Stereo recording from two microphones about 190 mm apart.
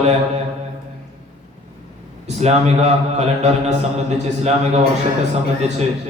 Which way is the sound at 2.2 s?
35° right (ahead or behind).